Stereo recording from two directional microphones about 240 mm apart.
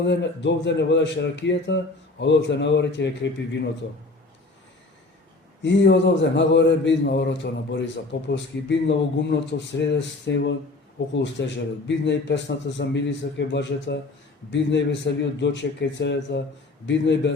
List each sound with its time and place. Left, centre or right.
0.0 s a man's voice: left
5.6 s a man's voice: left